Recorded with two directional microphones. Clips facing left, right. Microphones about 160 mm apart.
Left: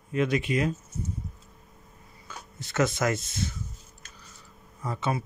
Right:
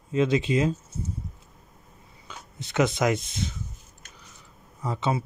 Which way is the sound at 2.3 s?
20° right (ahead or behind).